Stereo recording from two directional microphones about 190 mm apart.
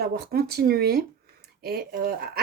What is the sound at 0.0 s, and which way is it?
Speech, 55° right (ahead or behind).